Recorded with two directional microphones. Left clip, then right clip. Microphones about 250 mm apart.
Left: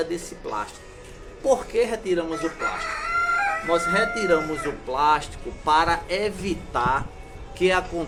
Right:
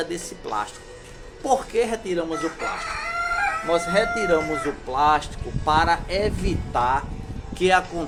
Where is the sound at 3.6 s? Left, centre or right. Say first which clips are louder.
Right 1 dB; centre.